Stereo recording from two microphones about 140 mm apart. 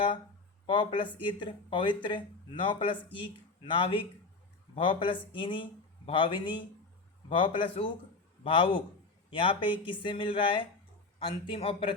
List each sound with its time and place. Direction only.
0.7 s speech: 35° left (ahead or behind)